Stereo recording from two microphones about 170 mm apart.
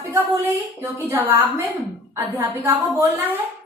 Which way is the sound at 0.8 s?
15° right (ahead or behind).